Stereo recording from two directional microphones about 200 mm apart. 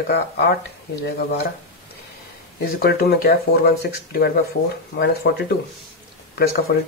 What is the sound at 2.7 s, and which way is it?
Speech, 50° left (ahead or behind).